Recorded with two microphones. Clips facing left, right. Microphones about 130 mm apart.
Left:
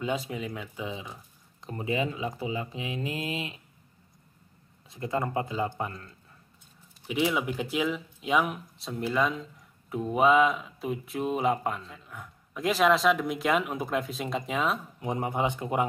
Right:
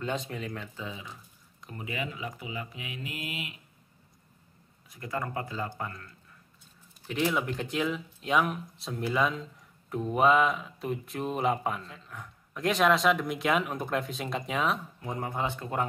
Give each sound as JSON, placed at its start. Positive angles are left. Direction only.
{"t": 0.0, "sound": "speech", "side_deg": 5}
{"t": 0.8, "sound": "speech", "side_deg": 20}
{"t": 4.8, "sound": "speech", "side_deg": 25}
{"t": 7.1, "sound": "speech", "side_deg": 5}
{"t": 15.0, "sound": "speech", "side_deg": 20}